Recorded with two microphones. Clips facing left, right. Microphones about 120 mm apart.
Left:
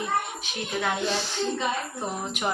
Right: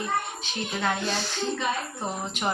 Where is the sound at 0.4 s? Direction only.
10° left (ahead or behind).